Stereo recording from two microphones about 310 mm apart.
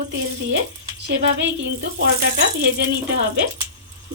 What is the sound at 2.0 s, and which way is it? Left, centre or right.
Speech, right.